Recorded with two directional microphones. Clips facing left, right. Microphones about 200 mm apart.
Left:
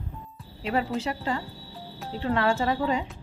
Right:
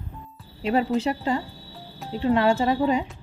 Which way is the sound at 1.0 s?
20° right (ahead or behind).